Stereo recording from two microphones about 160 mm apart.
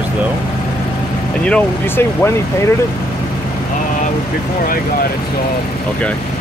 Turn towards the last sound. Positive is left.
turn(degrees=65)  # may be behind; listen again after turning